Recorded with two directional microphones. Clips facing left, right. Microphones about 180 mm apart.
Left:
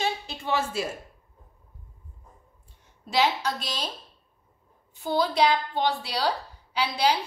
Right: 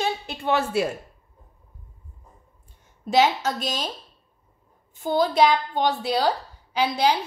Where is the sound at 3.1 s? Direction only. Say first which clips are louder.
Right 5 dB; 50° right (ahead or behind).